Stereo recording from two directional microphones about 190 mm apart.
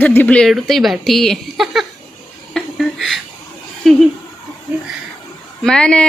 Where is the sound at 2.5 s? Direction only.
Centre (ahead or behind).